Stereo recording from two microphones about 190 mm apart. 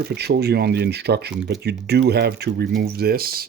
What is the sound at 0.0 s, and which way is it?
Speech, 60° right (ahead or behind).